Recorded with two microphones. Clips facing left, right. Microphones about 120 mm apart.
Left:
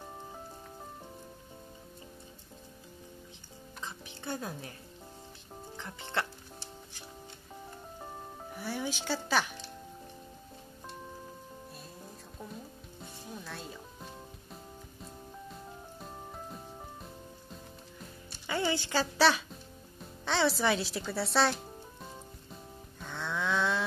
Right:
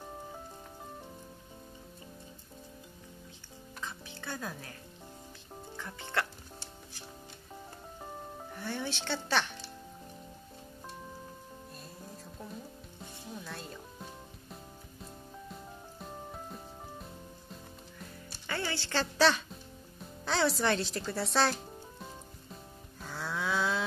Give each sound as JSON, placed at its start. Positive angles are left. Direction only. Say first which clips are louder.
{"t": 3.8, "sound": "music", "louder": "left 1 dB", "side_deg": 20}
{"t": 5.8, "sound": "music", "louder": "even", "side_deg": 20}
{"t": 8.5, "sound": "speech", "louder": "left 1 dB", "side_deg": 10}
{"t": 13.4, "sound": "music", "louder": "even", "side_deg": 0}
{"t": 16.0, "sound": "music", "louder": "right 2 dB", "side_deg": 0}
{"t": 18.5, "sound": "a woman's voice", "louder": "left 4 dB", "side_deg": 15}
{"t": 23.0, "sound": "livestock", "louder": "left 1 dB", "side_deg": -5}